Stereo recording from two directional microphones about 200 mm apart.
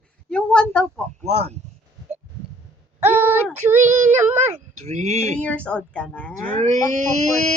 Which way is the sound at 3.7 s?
10° right (ahead or behind).